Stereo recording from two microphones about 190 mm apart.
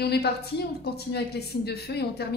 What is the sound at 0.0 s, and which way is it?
A woman's voice, 55° left (ahead or behind).